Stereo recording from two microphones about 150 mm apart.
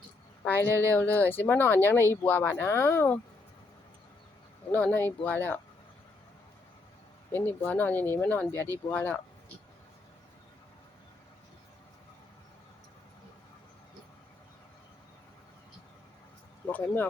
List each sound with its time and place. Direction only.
0.4 s speech: 15° left (ahead or behind)
0.7 s speech: 20° right (ahead or behind)
1.1 s speech: 10° left (ahead or behind)
4.7 s speech: 10° left (ahead or behind)
7.3 s speech: 10° left (ahead or behind)
16.6 s speech: 10° left (ahead or behind)